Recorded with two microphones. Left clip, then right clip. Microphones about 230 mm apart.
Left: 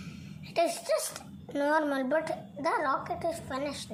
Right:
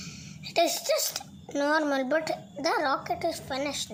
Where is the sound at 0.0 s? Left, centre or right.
Right.